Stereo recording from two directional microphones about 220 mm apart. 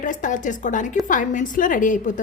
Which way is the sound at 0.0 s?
35° left (ahead or behind).